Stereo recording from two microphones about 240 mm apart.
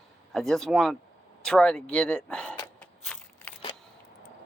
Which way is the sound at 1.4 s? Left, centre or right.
Centre.